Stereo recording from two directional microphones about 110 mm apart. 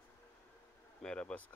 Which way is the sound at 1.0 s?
10° left (ahead or behind).